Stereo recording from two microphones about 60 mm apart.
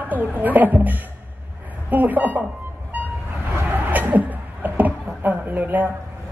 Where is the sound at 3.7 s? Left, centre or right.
Right.